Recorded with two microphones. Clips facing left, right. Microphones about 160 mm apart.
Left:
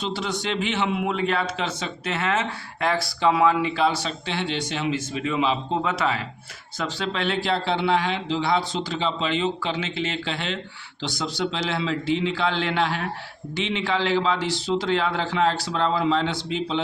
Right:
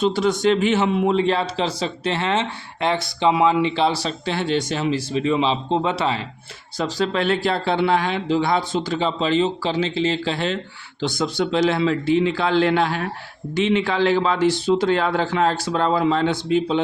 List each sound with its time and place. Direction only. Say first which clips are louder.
0.0 s a man's voice: right 9 dB; 50° right (ahead or behind); by 6.2 s 30° right (ahead or behind)
6.7 s speech: right 6 dB; 40° right (ahead or behind)
11.0 s speech: right 5 dB; 50° right (ahead or behind)